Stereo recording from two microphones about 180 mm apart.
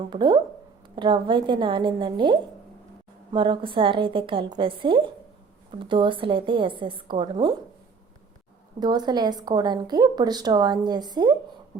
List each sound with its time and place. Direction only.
0.1 s speech: 25° right (ahead or behind)
8.8 s speech: 25° right (ahead or behind)